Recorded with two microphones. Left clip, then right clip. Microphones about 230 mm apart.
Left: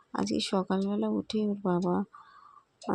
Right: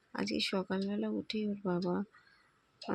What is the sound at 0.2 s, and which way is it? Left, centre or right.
Speech, left.